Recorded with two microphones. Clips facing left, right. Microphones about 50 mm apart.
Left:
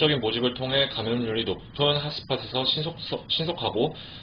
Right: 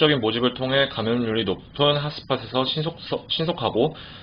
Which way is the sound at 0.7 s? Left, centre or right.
Right.